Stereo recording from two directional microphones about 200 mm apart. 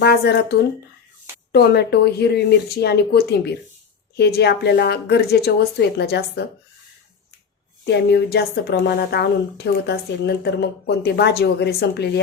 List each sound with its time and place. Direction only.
0.0 s speech: 55° left (ahead or behind)
1.5 s speech: 55° left (ahead or behind)
7.9 s speech: 55° left (ahead or behind)